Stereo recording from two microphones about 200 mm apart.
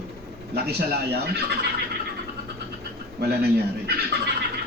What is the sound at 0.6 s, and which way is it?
Speech, 55° right (ahead or behind).